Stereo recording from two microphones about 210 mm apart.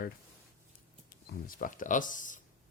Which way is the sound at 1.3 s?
40° left (ahead or behind).